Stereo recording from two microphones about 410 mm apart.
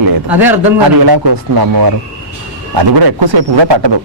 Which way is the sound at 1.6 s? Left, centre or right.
Right.